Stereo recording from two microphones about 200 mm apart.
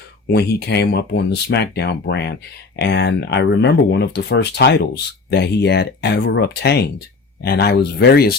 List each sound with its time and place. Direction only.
0.3 s speech: 55° left (ahead or behind)